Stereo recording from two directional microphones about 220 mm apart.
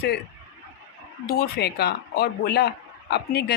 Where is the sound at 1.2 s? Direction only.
45° left (ahead or behind).